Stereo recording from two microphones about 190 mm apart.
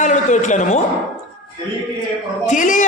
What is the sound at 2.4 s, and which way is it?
Speech, 40° left (ahead or behind).